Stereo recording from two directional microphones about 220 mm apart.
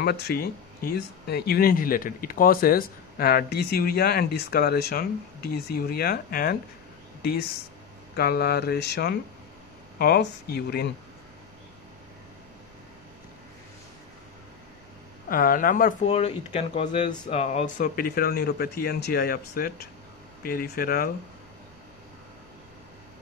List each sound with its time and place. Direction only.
0.0 s speech: 45° left (ahead or behind)
8.2 s speech: 45° left (ahead or behind)
15.2 s speech: 40° left (ahead or behind)
17.1 s speech: 20° left (ahead or behind)
17.4 s speech: 30° left (ahead or behind)